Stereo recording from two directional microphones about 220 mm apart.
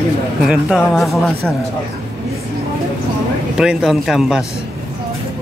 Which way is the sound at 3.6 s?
Centre (ahead or behind).